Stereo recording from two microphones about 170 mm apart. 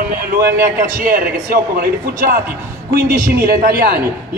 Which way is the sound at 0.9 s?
55° right (ahead or behind).